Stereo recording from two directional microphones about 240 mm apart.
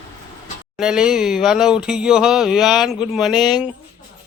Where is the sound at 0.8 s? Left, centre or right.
Centre.